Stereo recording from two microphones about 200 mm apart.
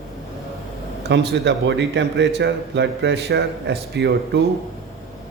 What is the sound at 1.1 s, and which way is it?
A man's voice, 60° right (ahead or behind).